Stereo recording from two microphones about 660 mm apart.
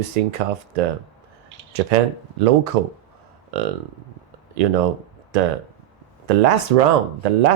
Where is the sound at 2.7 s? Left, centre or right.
Right.